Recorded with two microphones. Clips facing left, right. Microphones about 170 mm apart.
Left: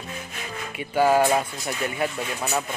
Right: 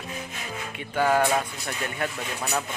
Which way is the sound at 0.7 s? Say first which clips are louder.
Left 4 dB; 10° left (ahead or behind).